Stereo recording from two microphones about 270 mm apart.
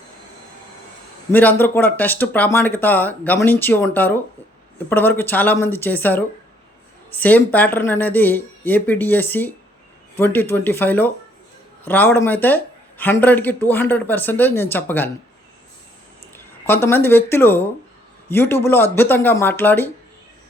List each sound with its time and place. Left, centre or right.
1.3 s speech: centre
16.3 s speech: centre